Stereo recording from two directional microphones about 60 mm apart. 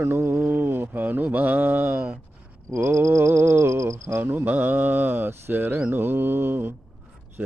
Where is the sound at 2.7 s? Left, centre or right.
Right.